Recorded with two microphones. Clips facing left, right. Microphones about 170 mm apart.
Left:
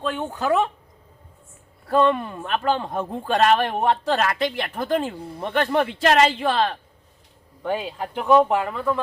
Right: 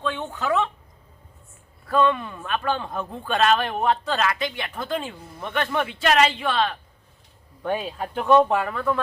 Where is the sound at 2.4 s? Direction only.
30° left (ahead or behind).